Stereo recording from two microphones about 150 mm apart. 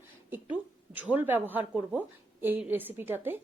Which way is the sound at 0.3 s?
10° right (ahead or behind).